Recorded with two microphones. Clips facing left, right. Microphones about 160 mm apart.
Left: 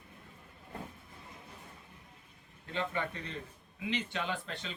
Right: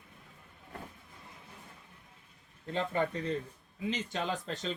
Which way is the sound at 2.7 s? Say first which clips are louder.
Right 4 dB; 40° right (ahead or behind).